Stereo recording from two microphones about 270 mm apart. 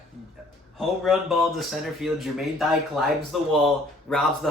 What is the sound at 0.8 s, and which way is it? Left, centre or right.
Speech, centre.